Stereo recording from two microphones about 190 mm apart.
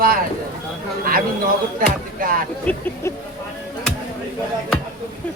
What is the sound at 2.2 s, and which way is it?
Speech, 50° right (ahead or behind).